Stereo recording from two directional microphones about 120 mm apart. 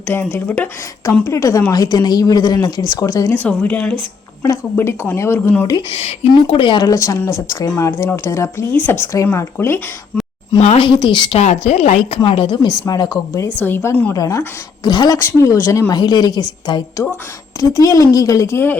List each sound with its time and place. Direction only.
0.1 s speech: 15° left (ahead or behind)
1.2 s a woman's voice: 25° left (ahead or behind)
3.3 s speech: 15° left (ahead or behind)
4.4 s speech: 25° left (ahead or behind)
6.3 s speech: 45° left (ahead or behind)
6.8 s speech: 25° left (ahead or behind)
10.6 s speech: 65° left (ahead or behind)
10.8 s a woman's voice: 40° left (ahead or behind)
11.3 s speech: 60° left (ahead or behind)
12.2 s speech: 45° left (ahead or behind)
12.8 s a woman's voice: 30° left (ahead or behind)
13.6 s a woman's voice: 15° left (ahead or behind); by 15.2 s 35° left (ahead or behind)
15.2 s a woman's voice: 25° left (ahead or behind)